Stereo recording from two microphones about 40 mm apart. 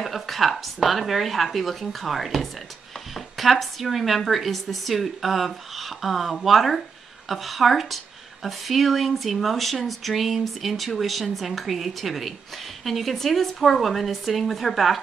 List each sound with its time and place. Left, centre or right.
0.0 s a woman's voice: centre